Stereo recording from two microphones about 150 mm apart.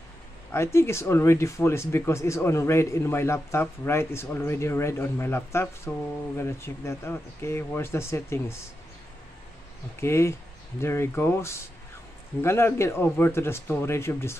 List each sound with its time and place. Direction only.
0.5 s speech: 20° left (ahead or behind)
9.9 s speech: 15° left (ahead or behind)